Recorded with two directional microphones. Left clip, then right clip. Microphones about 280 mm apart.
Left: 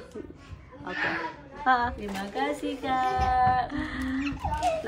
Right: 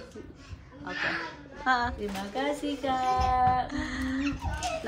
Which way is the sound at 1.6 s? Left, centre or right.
Centre.